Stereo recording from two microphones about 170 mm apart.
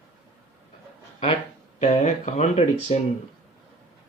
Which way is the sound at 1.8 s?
45° left (ahead or behind).